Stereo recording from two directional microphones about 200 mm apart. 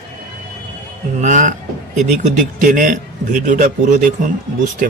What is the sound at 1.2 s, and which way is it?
Speech, 40° right (ahead or behind).